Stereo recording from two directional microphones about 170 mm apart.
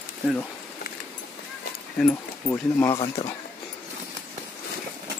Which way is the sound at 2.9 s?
30° left (ahead or behind).